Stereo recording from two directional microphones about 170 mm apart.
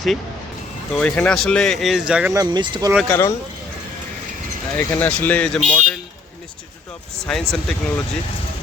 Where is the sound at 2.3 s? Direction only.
25° right (ahead or behind).